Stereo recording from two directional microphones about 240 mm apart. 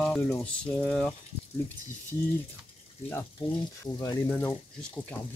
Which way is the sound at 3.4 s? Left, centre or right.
Left.